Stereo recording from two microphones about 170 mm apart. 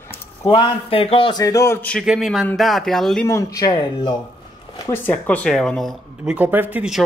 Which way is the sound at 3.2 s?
15° left (ahead or behind).